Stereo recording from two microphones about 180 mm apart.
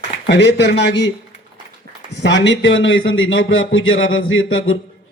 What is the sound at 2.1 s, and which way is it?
Speech, 75° left (ahead or behind).